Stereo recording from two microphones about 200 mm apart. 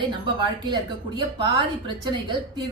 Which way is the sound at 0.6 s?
20° right (ahead or behind).